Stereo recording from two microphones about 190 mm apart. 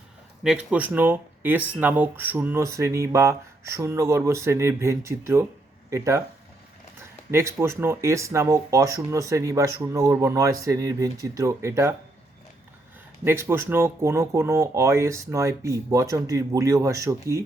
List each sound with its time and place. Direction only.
0.4 s speech: 5° right (ahead or behind)
7.3 s speech: 15° right (ahead or behind)
13.2 s speech: 10° right (ahead or behind)